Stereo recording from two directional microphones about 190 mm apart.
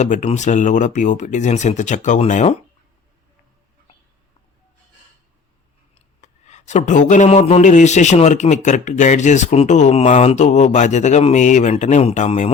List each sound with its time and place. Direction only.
0.0 s speech: 40° left (ahead or behind)
5.9 s speech: 35° left (ahead or behind)